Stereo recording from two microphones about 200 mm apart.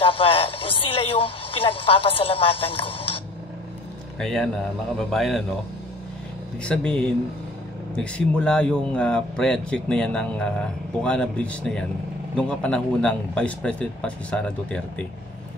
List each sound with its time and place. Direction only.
0.0 s a woman's voice: 25° left (ahead or behind)
4.2 s speech: centre (ahead or behind)
6.6 s speech: 5° left (ahead or behind)